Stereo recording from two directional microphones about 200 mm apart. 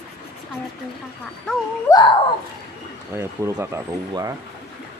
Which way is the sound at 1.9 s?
25° left (ahead or behind).